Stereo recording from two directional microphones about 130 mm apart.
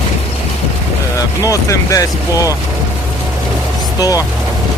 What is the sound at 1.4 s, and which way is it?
Speech, 25° left (ahead or behind).